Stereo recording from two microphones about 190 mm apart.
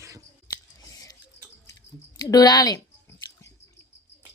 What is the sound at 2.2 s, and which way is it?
Speech, 20° left (ahead or behind).